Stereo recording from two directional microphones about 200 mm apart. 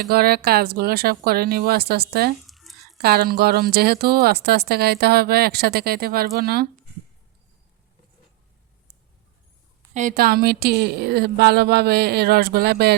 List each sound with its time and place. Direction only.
0.1 s speech: 50° right (ahead or behind)
2.4 s a sound: centre (ahead or behind)
3.0 s speech: 50° right (ahead or behind)
9.9 s speech: 40° right (ahead or behind)